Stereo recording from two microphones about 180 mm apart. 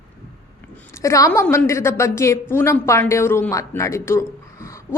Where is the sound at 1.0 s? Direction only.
15° left (ahead or behind).